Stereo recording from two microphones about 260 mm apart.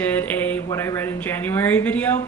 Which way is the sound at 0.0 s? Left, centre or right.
Centre.